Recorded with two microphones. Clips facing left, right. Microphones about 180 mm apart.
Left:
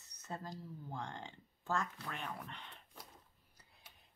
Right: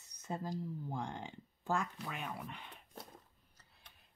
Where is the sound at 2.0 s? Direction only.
5° right (ahead or behind).